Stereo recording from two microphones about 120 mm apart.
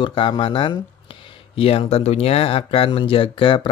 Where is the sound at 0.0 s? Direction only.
40° left (ahead or behind).